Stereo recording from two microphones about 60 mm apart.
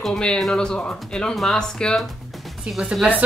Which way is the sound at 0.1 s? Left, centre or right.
Centre.